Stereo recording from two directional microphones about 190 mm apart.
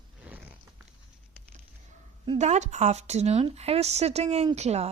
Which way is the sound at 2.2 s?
40° right (ahead or behind).